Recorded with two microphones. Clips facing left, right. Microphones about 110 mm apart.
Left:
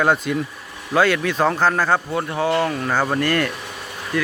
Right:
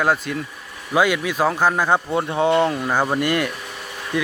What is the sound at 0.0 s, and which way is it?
A man's voice, centre (ahead or behind).